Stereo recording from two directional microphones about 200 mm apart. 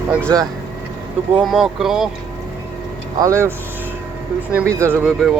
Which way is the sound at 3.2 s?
15° right (ahead or behind).